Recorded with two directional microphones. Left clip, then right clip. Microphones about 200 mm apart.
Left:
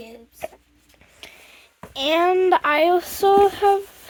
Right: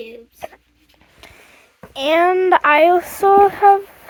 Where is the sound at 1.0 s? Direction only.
10° left (ahead or behind).